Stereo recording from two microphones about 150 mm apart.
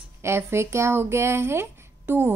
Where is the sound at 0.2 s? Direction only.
15° right (ahead or behind).